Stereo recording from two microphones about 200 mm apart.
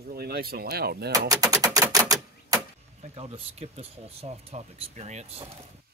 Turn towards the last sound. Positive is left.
turn(degrees=-35)  # may be behind; listen again after turning